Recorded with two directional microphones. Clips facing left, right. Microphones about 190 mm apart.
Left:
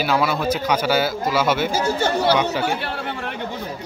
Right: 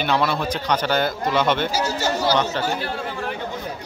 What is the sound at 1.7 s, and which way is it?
Speech, 55° left (ahead or behind).